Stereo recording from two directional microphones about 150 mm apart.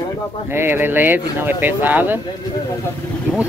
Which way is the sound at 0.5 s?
15° right (ahead or behind).